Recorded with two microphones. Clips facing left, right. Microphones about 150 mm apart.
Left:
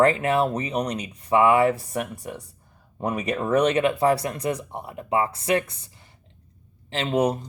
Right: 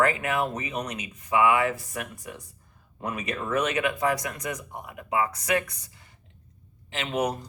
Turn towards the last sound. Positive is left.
turn(degrees=30)  # may be behind; listen again after turning